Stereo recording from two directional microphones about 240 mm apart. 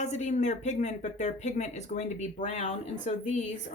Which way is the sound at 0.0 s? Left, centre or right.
Left.